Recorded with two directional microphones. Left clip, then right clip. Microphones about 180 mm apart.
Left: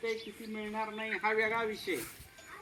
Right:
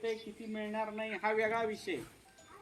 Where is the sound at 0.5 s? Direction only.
20° right (ahead or behind).